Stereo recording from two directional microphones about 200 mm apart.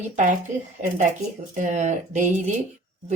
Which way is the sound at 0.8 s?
35° right (ahead or behind).